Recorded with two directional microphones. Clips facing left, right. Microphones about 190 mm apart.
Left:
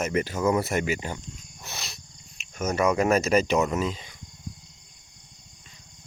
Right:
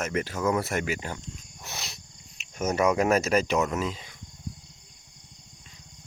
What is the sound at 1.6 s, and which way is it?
Wild animals, 15° right (ahead or behind).